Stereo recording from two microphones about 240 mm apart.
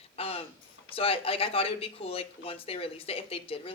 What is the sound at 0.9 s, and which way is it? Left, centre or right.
Speech, left.